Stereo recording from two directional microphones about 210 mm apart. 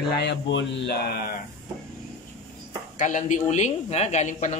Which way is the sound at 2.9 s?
35° left (ahead or behind).